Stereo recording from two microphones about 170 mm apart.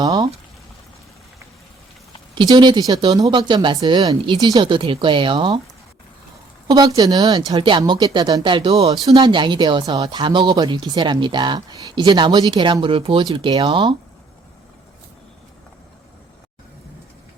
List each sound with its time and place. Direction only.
0.0 s speech: 25° right (ahead or behind)
2.3 s speech: 25° right (ahead or behind)
6.7 s speech: 25° right (ahead or behind)